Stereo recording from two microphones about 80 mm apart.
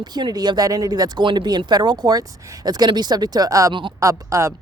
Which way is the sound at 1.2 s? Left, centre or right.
Right.